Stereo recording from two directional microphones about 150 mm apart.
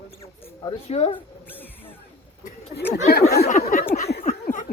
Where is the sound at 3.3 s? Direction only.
90° left; by 4.7 s 65° left (ahead or behind).